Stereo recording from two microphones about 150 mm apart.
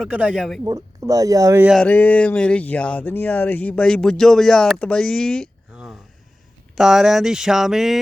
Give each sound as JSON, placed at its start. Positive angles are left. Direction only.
{"t": 0.0, "sound": "speech", "side_deg": -5}
{"t": 0.6, "sound": "speech", "side_deg": -20}
{"t": 1.8, "sound": "speech", "side_deg": 10}
{"t": 5.7, "sound": "a sound", "side_deg": -5}
{"t": 6.7, "sound": "speech", "side_deg": -5}